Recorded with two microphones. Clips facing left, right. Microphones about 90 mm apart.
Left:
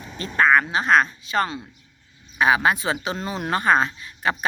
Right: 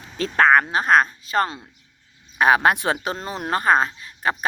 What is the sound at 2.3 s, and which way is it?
Speech, 55° right (ahead or behind).